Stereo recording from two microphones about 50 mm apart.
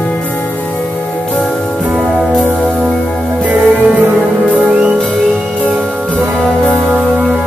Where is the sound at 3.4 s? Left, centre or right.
Right.